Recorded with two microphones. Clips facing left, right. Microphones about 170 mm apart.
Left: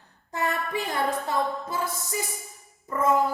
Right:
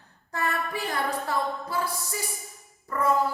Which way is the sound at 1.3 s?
20° left (ahead or behind).